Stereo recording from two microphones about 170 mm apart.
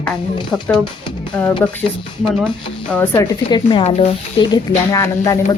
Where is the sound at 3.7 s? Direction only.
30° left (ahead or behind).